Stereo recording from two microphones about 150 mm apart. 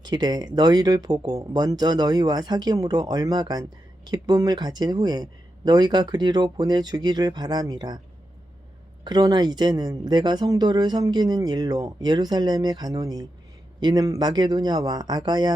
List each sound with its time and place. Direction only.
0.0 s speech: 30° right (ahead or behind)
9.0 s speech: 30° right (ahead or behind)